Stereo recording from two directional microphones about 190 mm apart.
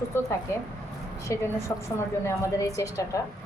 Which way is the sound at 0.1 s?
10° left (ahead or behind).